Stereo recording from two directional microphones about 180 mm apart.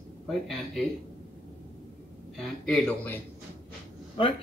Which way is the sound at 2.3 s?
5° left (ahead or behind).